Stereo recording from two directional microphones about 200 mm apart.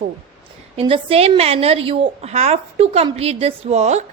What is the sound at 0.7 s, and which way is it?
A woman's voice, 30° right (ahead or behind).